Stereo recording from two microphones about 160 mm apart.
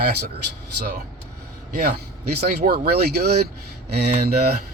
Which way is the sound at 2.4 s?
70° right (ahead or behind).